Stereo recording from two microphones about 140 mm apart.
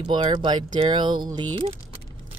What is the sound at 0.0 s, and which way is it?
Speech, 35° right (ahead or behind).